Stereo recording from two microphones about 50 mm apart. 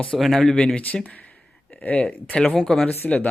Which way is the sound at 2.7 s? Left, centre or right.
Centre.